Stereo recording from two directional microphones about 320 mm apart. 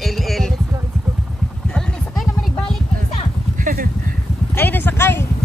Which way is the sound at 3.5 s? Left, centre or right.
Right.